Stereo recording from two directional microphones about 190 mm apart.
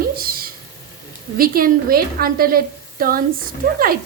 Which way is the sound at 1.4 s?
50° right (ahead or behind).